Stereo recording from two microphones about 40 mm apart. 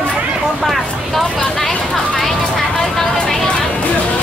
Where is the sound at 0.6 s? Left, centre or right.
Centre.